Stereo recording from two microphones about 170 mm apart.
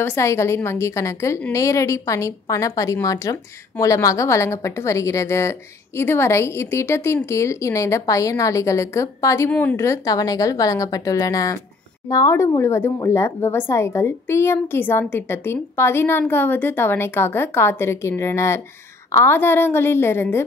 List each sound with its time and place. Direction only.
0.0 s a woman's voice: 15° left (ahead or behind)